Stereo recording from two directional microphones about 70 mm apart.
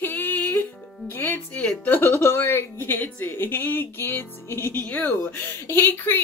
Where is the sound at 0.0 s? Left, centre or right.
Left.